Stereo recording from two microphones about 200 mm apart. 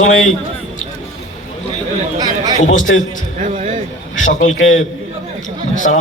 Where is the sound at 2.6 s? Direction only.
40° left (ahead or behind).